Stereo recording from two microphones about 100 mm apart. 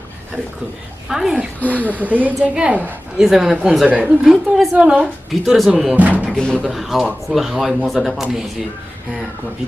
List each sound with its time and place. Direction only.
1.0 s speech: 5° right (ahead or behind)
1.7 s a woman's voice: 15° right (ahead or behind)
4.0 s a woman's voice: centre (ahead or behind)
5.3 s a woman's voice: centre (ahead or behind)
6.3 s speech: 10° left (ahead or behind)